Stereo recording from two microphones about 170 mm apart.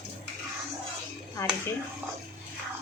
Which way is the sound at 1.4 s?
15° left (ahead or behind).